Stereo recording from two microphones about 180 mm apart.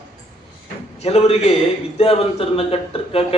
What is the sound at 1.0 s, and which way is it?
A man's voice, 35° left (ahead or behind).